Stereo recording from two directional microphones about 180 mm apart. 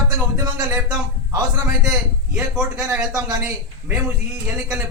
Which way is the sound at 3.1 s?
20° right (ahead or behind).